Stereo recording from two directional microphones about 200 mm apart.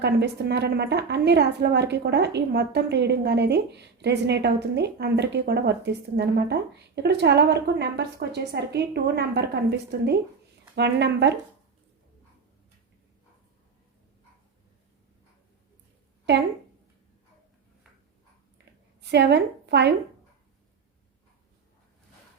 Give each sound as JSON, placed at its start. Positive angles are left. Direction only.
{"t": 0.0, "sound": "a woman's voice", "side_deg": -60}
{"t": 16.3, "sound": "a woman's voice", "side_deg": -60}
{"t": 19.0, "sound": "a woman's voice", "side_deg": -60}